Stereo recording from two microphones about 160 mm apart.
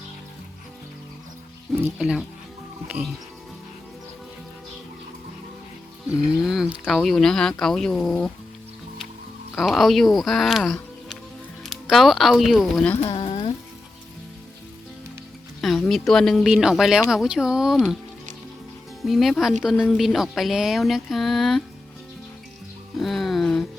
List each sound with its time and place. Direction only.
2.0 s speech: centre (ahead or behind)
2.8 s music: 10° right (ahead or behind)
6.4 s speech: centre (ahead or behind)
9.6 s speech: centre (ahead or behind)
13.0 s a sound: 35° left (ahead or behind)
15.6 s speech: centre (ahead or behind)
19.0 s speech: centre (ahead or behind)
23.0 s music: centre (ahead or behind)